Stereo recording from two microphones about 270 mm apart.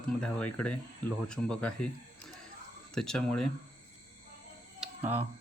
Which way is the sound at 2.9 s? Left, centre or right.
Centre.